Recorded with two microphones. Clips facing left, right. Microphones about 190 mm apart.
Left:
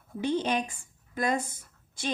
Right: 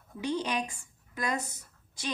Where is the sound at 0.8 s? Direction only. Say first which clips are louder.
Left 5 dB; 50° left (ahead or behind).